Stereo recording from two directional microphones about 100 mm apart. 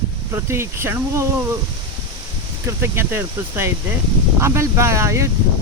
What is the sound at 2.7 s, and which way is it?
Speech, 25° right (ahead or behind).